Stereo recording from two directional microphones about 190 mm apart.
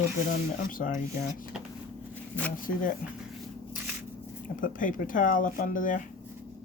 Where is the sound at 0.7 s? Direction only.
45° left (ahead or behind).